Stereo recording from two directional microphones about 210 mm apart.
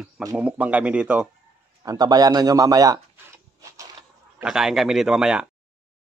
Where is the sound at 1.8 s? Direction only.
15° right (ahead or behind).